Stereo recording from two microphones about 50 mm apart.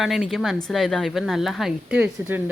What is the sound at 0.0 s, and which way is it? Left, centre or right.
Speech, centre.